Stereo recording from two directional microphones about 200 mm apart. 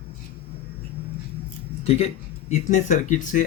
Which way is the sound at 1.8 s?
30° left (ahead or behind).